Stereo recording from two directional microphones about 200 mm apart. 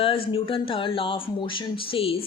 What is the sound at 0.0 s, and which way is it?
Speech, 25° left (ahead or behind).